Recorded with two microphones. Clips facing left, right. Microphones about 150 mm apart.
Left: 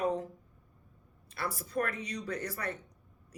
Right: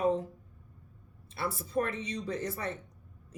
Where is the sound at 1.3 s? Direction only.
25° right (ahead or behind).